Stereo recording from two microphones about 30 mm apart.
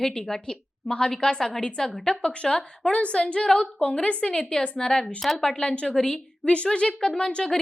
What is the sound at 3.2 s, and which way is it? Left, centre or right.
Speech, left.